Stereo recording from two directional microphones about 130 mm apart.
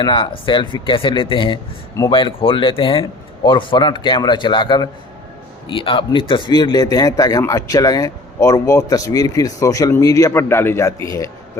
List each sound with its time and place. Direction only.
0.0 s a man's voice: 40° left (ahead or behind)